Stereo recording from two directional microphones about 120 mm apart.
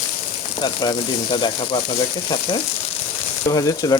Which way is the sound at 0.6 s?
40° left (ahead or behind).